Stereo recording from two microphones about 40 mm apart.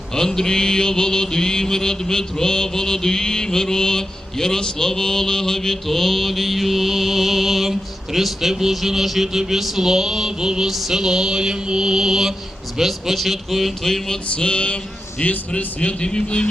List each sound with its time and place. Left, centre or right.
0.1 s mantra: centre
14.3 s speech: left